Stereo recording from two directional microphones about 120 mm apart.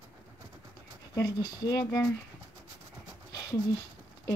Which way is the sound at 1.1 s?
35° left (ahead or behind).